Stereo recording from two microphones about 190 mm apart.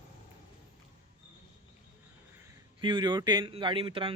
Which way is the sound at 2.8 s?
25° right (ahead or behind).